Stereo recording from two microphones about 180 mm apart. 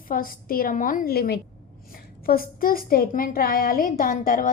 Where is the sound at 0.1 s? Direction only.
50° left (ahead or behind).